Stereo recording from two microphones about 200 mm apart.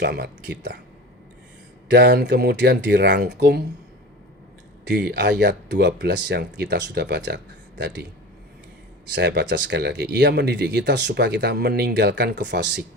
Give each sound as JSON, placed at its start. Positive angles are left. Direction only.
{"t": 0.0, "sound": "speech", "side_deg": -55}
{"t": 1.9, "sound": "speech", "side_deg": -60}
{"t": 4.9, "sound": "speech", "side_deg": -55}
{"t": 9.1, "sound": "speech", "side_deg": -60}